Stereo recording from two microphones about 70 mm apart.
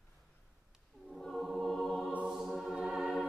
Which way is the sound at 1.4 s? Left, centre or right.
Centre.